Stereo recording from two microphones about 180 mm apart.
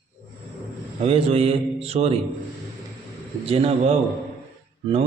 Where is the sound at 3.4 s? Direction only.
35° right (ahead or behind).